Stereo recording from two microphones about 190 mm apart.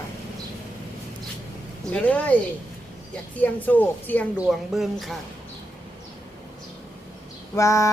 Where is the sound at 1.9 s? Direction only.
10° left (ahead or behind).